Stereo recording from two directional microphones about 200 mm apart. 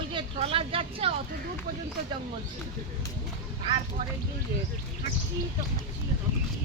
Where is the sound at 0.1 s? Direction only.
25° right (ahead or behind).